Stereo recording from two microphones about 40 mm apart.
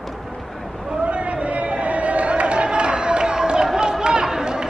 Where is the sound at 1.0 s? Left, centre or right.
Right; by 3.7 s centre.